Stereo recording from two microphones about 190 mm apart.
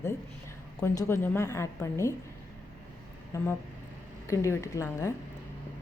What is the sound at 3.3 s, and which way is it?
A woman's voice, 10° left (ahead or behind).